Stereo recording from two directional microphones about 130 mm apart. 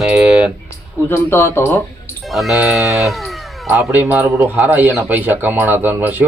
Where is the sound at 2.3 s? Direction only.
Centre (ahead or behind).